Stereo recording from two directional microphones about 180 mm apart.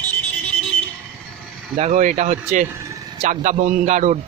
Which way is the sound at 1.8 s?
40° right (ahead or behind).